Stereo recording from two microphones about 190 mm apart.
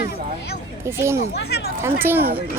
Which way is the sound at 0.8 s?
15° right (ahead or behind).